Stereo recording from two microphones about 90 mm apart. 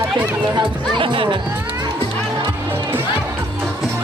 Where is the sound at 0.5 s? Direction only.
65° right (ahead or behind).